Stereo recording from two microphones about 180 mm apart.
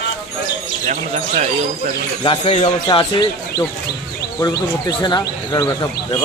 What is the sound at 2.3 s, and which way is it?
Speech, 35° left (ahead or behind).